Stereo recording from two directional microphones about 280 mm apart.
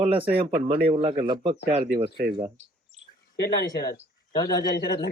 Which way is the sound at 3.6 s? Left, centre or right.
Centre.